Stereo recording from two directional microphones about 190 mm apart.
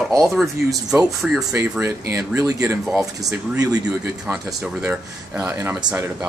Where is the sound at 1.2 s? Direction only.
Centre (ahead or behind).